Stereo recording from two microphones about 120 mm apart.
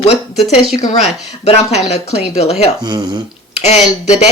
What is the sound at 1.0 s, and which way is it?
Speech, 65° left (ahead or behind).